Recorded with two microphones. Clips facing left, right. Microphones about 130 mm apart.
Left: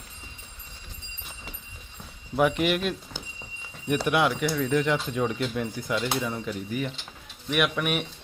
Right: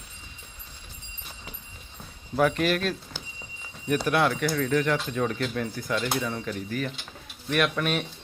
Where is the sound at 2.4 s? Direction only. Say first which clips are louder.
Even; 15° left (ahead or behind).